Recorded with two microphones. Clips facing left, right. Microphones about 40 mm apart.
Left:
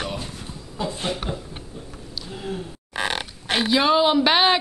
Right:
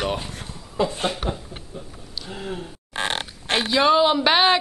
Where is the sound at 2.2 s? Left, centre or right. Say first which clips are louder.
Even; right.